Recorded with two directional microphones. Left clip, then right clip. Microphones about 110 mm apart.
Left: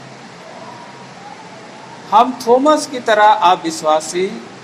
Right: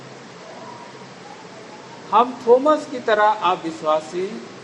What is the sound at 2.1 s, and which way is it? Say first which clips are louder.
A man's voice: left 4 dB; 30° left (ahead or behind).